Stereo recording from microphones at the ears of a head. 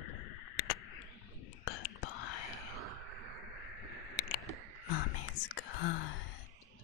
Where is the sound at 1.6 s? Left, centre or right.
Left.